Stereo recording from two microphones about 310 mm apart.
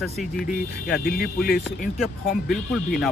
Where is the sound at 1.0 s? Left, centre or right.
Left.